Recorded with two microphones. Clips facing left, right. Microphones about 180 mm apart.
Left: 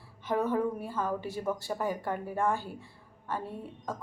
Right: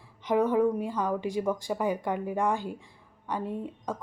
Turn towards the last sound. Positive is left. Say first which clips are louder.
# right 5 dB
turn(degrees=-15)  # may be behind; listen again after turning